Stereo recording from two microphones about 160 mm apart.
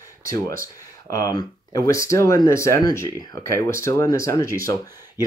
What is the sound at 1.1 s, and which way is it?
Speech, 25° left (ahead or behind).